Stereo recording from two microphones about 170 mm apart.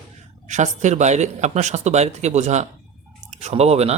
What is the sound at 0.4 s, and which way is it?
Speech, 45° right (ahead or behind).